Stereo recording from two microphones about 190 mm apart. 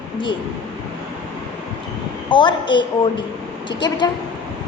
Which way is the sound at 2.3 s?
25° left (ahead or behind).